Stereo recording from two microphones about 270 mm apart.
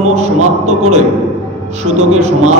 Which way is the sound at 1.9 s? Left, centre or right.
Right.